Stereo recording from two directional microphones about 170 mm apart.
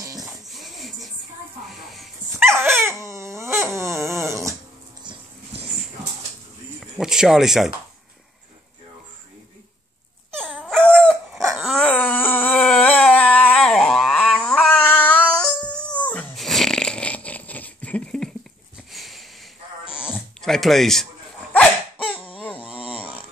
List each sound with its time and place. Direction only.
0.2 s wheeze: centre (ahead or behind)
1.7 s music: centre (ahead or behind)
2.3 s dog: 15° right (ahead or behind)
6.8 s a sound: 5° right (ahead or behind)
10.6 s dog: 5° left (ahead or behind)
18.9 s sniff: centre (ahead or behind)
20.0 s a sound: 5° left (ahead or behind)
21.5 s dog: 5° left (ahead or behind)